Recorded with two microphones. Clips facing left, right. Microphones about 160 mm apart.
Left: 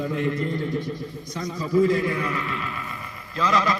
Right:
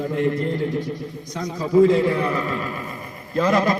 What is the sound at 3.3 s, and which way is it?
Speech, 50° right (ahead or behind).